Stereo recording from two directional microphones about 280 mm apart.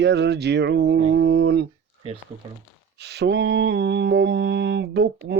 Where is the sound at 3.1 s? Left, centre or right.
Right.